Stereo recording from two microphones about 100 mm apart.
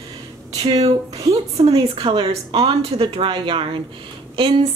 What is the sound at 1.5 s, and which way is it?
A woman's voice, 70° right (ahead or behind).